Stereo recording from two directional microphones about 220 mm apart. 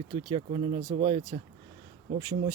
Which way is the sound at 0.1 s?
20° right (ahead or behind).